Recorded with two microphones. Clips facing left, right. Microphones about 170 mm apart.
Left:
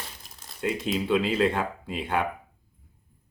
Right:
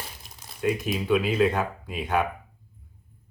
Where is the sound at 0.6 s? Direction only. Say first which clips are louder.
Right 1 dB; 25° left (ahead or behind).